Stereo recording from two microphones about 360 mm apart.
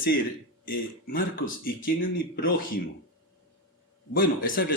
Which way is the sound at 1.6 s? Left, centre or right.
Left.